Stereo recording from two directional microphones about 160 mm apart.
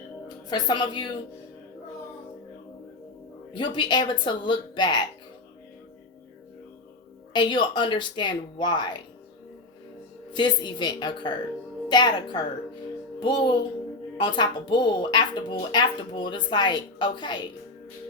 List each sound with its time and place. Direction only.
0.5 s speech: 25° left (ahead or behind)
3.5 s speech: 30° left (ahead or behind)
7.3 s speech: 30° left (ahead or behind)
10.3 s speech: 30° left (ahead or behind)